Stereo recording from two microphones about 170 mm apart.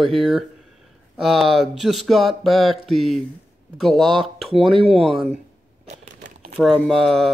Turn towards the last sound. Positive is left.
turn(degrees=0)  # may be behind; listen again after turning